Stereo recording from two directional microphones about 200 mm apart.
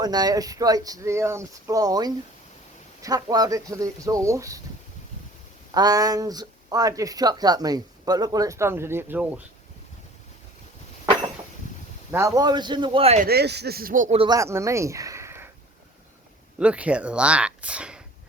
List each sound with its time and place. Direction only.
0.0 s speech: 20° right (ahead or behind)
5.7 s speech: 20° right (ahead or behind)
12.1 s speech: 15° right (ahead or behind)
13.2 s speech: 55° right (ahead or behind)
14.2 s speech: 20° right (ahead or behind)
16.6 s speech: 5° right (ahead or behind)